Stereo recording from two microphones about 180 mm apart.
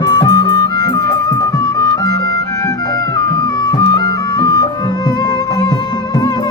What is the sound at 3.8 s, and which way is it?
Music, 20° left (ahead or behind).